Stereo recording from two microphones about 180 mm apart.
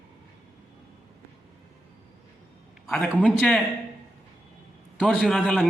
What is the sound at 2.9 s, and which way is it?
Speech, 5° left (ahead or behind).